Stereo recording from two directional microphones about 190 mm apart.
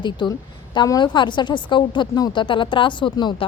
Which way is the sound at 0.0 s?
25° left (ahead or behind).